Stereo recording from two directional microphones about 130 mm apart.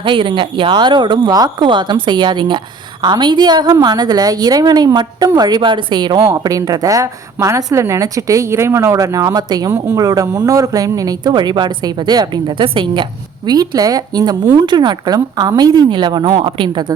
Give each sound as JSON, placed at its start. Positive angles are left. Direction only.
{"t": 0.0, "sound": "a woman's voice", "side_deg": -40}